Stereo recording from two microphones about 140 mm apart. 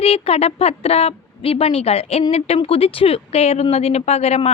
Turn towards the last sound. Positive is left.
turn(degrees=50)  # may be behind; listen again after turning